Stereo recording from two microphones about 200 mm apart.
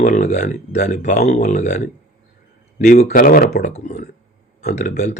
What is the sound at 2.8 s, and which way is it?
Speech, 45° left (ahead or behind).